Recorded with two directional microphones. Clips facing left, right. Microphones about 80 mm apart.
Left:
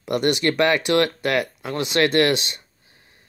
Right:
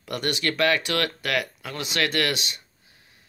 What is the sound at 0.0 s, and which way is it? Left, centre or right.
Speech, left.